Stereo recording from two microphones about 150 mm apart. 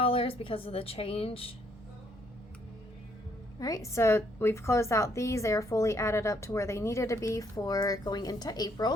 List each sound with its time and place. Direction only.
0.0 s a woman's voice: 40° left (ahead or behind)
3.6 s a woman's voice: 20° left (ahead or behind)